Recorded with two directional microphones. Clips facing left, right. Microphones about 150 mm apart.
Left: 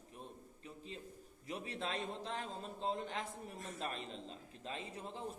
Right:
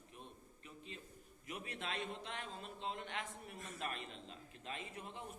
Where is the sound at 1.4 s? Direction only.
30° left (ahead or behind).